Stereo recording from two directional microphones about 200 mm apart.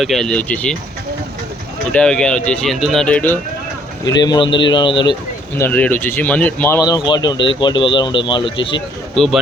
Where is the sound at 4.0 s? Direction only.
20° left (ahead or behind).